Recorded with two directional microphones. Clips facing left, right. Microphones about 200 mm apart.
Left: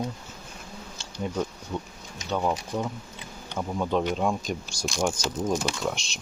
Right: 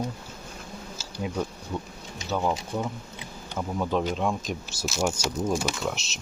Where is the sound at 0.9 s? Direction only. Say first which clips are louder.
Left 1 dB; 5° right (ahead or behind).